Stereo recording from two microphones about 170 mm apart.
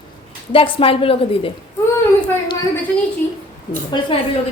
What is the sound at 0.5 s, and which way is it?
Speech, 35° left (ahead or behind).